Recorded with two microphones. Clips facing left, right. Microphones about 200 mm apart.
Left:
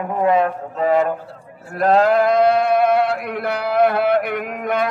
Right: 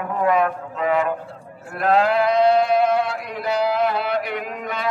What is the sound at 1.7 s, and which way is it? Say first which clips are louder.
Sheep: left 3 dB; 40° left (ahead or behind).